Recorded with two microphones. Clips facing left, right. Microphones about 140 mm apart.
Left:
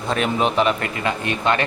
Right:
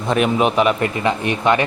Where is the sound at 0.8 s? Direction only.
20° right (ahead or behind).